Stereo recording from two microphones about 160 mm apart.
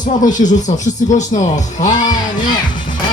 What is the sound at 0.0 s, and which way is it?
Speech, 50° left (ahead or behind).